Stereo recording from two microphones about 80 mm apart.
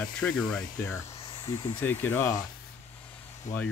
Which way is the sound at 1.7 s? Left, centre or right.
Left.